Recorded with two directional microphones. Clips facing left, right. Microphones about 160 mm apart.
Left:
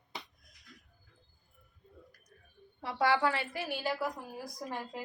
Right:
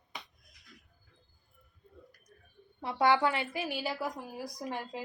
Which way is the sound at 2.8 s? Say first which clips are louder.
Right 2 dB; 20° right (ahead or behind).